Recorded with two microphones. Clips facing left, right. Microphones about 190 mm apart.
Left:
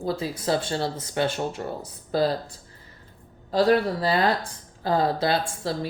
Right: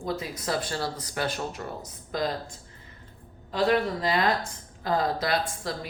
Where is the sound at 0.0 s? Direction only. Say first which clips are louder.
Left 4 dB; 30° left (ahead or behind).